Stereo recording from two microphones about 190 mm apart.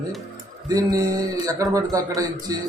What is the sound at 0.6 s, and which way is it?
A man's voice, 20° right (ahead or behind).